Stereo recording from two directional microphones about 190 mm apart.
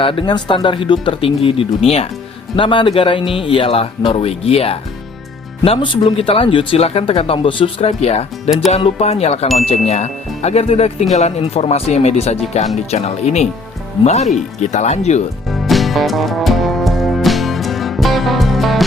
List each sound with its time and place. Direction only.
0.0 s speech: 25° left (ahead or behind)
15.4 s music: centre (ahead or behind)